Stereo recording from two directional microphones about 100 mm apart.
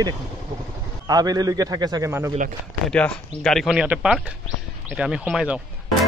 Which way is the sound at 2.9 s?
10° left (ahead or behind).